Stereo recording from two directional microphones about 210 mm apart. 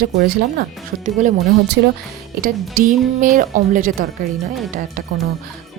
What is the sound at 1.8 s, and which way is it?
Speech, 55° right (ahead or behind).